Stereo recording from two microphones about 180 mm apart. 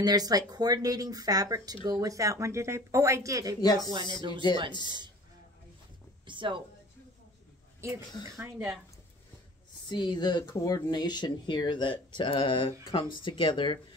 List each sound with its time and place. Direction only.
0.0 s speech: 20° right (ahead or behind)
3.6 s speech: 20° left (ahead or behind)
3.9 s speech: 25° right (ahead or behind)
6.2 s a woman's voice: 25° right (ahead or behind)
8.3 s speech: 10° right (ahead or behind)
9.8 s speech: 25° left (ahead or behind)